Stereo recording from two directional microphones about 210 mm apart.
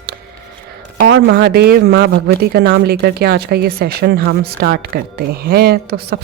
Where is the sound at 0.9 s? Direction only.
50° right (ahead or behind).